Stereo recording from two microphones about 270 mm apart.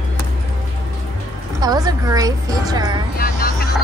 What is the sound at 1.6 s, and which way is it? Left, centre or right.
A woman's voice, centre.